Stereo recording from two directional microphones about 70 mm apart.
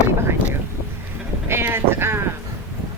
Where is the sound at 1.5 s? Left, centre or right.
Right.